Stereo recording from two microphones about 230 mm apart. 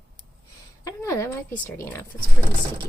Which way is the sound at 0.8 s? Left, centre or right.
Centre.